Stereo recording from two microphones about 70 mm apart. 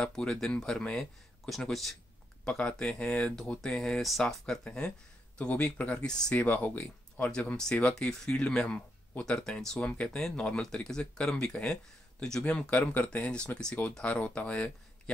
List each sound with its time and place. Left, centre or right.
0.0 s speech: centre
2.4 s speech: centre
6.4 s speech: left
6.8 s speech: centre